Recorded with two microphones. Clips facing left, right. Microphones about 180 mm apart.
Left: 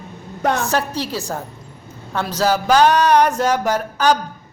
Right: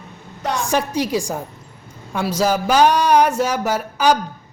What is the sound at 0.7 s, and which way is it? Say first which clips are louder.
Speech: right 2 dB; 10° right (ahead or behind).